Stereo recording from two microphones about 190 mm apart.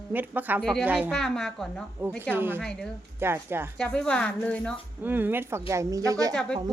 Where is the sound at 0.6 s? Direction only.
Centre (ahead or behind).